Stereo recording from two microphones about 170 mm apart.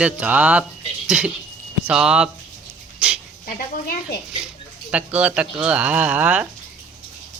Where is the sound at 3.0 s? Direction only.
10° right (ahead or behind).